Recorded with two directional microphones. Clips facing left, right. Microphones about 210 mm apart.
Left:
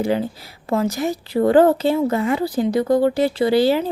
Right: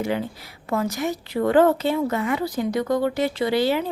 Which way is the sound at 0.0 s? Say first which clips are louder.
Left 5 dB; 35° left (ahead or behind).